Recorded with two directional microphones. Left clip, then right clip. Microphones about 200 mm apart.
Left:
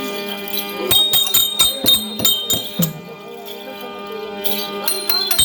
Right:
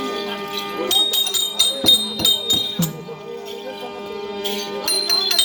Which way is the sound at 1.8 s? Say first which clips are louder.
Right 1 dB; 15° right (ahead or behind).